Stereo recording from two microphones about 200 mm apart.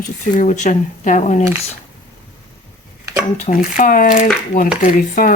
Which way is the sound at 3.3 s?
35° left (ahead or behind).